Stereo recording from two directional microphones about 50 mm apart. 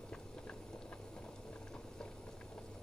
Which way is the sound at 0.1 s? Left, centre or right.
Left.